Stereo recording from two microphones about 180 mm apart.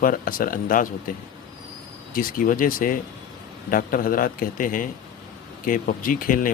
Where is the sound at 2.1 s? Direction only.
50° left (ahead or behind).